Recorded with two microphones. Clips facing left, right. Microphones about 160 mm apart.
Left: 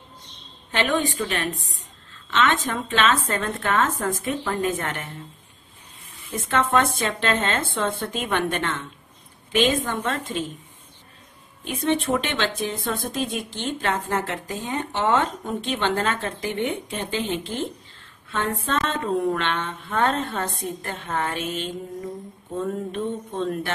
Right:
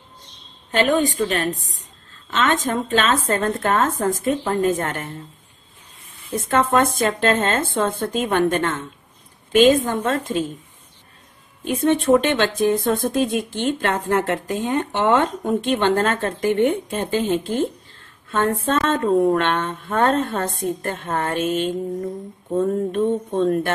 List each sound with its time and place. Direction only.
0.7 s speech: 45° right (ahead or behind)
6.3 s speech: 40° right (ahead or behind)
11.6 s speech: 45° right (ahead or behind)